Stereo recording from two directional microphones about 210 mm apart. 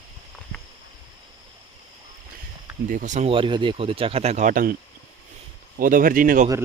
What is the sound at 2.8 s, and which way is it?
Speech, 40° right (ahead or behind).